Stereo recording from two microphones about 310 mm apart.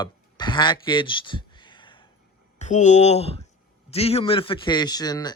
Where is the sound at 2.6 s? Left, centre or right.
Left.